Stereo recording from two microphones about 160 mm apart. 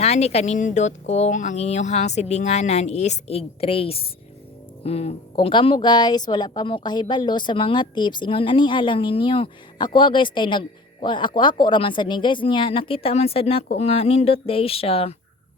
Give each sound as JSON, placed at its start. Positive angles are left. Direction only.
{"t": 0.0, "sound": "a woman's voice", "side_deg": 40}